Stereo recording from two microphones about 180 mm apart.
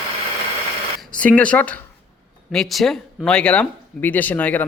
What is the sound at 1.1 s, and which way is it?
A man's voice, 5° left (ahead or behind).